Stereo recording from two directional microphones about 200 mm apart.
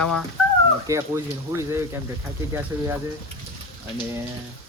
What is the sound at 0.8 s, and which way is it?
Speech, 15° right (ahead or behind).